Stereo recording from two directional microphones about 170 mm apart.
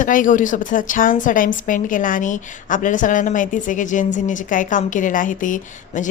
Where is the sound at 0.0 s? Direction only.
50° left (ahead or behind).